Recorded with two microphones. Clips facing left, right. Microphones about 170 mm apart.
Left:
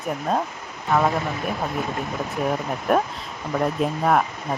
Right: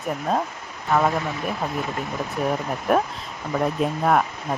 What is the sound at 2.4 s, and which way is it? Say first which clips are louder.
Speech: even; centre (ahead or behind).